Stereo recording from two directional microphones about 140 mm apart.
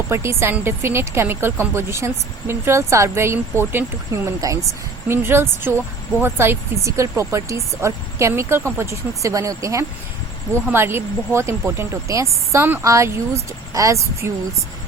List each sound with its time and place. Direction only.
0.1 s a woman's voice: 20° right (ahead or behind)